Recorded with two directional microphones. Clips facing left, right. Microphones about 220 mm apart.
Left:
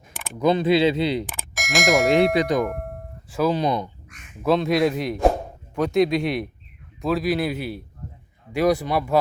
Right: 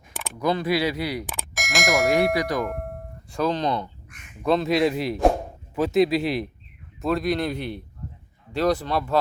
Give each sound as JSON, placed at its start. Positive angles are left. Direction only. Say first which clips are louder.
{"t": 0.3, "sound": "speech", "louder": "left 5 dB", "side_deg": 20}
{"t": 1.3, "sound": "speech", "louder": "left 2 dB", "side_deg": 0}
{"t": 2.3, "sound": "speech", "louder": "left 4 dB", "side_deg": 20}
{"t": 2.6, "sound": "speech", "louder": "left 1 dB", "side_deg": 0}
{"t": 4.1, "sound": "speech", "louder": "left 2 dB", "side_deg": 0}